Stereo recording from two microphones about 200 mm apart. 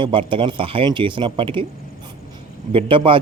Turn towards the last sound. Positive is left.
turn(degrees=-25)  # may be behind; listen again after turning